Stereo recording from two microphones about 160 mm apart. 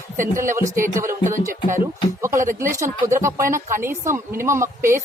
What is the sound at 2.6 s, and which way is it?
Speech, 20° right (ahead or behind).